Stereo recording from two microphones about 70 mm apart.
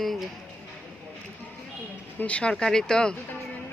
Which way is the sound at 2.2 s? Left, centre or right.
Centre.